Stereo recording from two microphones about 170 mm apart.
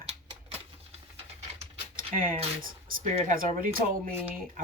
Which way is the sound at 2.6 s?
45° right (ahead or behind).